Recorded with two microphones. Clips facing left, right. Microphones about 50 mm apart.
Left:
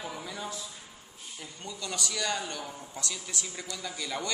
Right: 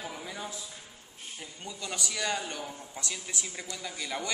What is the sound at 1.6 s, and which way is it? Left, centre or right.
A man's voice, centre.